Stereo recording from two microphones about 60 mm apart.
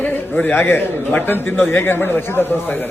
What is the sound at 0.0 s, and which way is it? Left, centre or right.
Speech, left.